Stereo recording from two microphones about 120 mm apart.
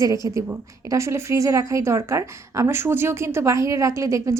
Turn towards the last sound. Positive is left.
turn(degrees=-25)  # may be behind; listen again after turning